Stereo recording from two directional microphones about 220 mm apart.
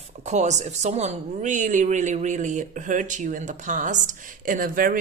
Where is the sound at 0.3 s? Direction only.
30° right (ahead or behind).